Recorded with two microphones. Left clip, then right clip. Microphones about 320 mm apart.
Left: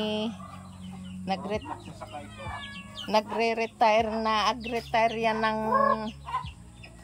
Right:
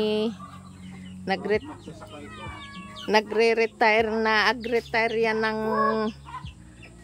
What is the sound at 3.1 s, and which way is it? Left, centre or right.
Speech, centre.